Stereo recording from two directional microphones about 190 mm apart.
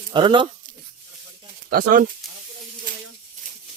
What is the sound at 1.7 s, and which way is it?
Speech, 50° right (ahead or behind).